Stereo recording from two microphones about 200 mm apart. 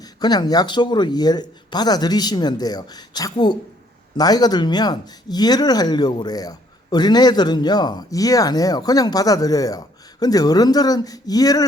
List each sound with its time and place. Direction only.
0.2 s speech: 20° left (ahead or behind)